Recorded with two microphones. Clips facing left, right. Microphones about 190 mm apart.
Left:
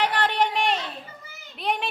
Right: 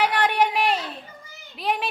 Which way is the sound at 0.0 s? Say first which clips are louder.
Right 2 dB; 10° right (ahead or behind).